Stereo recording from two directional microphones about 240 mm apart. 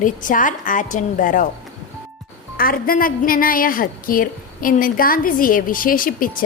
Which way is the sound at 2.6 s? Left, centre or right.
Left.